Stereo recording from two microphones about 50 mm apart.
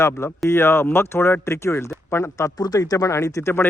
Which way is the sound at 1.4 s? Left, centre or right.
Left.